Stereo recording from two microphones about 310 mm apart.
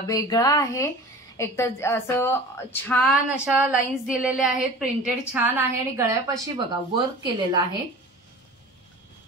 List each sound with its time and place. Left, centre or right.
0.0 s a woman's voice: centre